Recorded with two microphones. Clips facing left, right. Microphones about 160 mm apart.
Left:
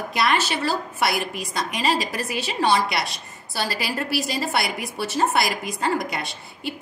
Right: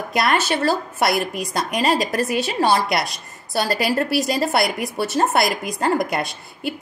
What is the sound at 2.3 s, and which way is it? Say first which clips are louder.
A woman's voice: right 1 dB; 45° right (ahead or behind).